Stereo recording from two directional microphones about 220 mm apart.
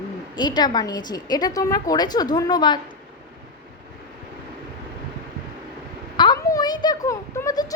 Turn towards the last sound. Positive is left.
turn(degrees=15)  # may be behind; listen again after turning